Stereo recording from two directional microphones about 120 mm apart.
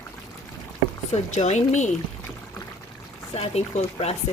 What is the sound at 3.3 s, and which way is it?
Speech, 55° left (ahead or behind).